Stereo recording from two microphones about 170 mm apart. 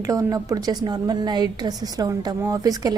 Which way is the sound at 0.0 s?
20° right (ahead or behind).